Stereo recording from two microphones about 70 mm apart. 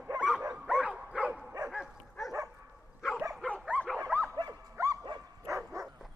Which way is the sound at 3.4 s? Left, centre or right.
Centre.